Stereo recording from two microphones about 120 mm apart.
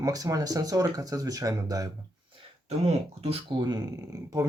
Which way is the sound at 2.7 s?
60° right (ahead or behind).